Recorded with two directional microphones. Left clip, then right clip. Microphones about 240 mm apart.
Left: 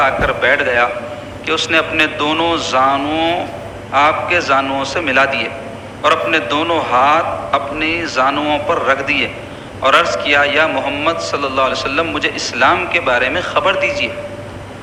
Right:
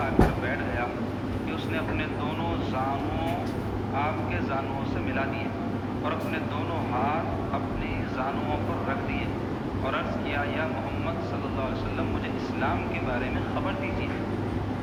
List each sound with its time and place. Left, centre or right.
0.0 s a man's voice: left